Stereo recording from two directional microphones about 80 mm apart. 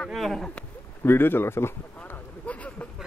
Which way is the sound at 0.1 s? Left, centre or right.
Centre.